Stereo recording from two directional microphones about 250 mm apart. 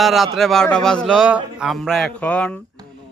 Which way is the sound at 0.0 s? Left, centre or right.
Centre.